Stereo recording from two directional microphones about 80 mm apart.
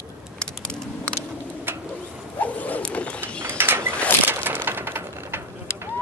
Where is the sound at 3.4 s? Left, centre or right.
Right.